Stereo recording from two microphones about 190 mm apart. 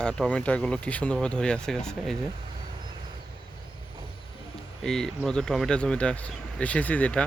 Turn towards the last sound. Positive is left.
turn(degrees=5)  # may be behind; listen again after turning